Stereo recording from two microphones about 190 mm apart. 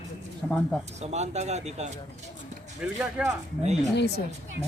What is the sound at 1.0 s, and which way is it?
Speech, 35° right (ahead or behind).